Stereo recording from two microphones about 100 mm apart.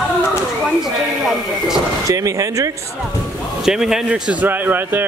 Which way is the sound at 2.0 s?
35° right (ahead or behind).